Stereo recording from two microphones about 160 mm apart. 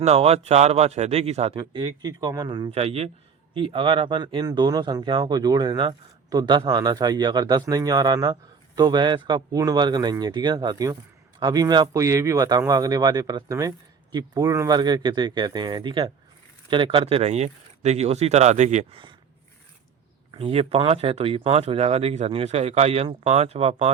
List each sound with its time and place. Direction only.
0.0 s speech: 40° right (ahead or behind)
1.5 s speech: 30° right (ahead or behind); by 18.9 s 45° right (ahead or behind)
20.3 s speech: 35° right (ahead or behind)